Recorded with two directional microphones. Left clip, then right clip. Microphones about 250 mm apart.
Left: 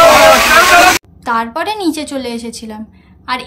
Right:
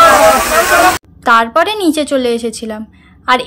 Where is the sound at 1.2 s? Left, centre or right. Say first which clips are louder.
Right 11 dB; centre.